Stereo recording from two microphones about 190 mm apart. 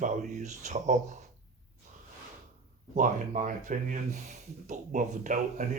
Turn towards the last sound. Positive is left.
turn(degrees=-40)  # may be behind; listen again after turning